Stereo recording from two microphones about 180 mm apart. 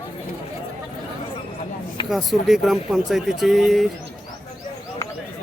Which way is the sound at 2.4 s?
Centre (ahead or behind).